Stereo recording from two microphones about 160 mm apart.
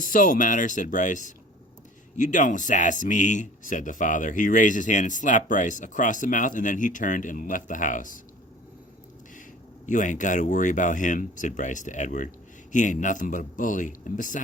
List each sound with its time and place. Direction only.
0.0 s speech: 55° left (ahead or behind)
9.8 s speech: 50° left (ahead or behind)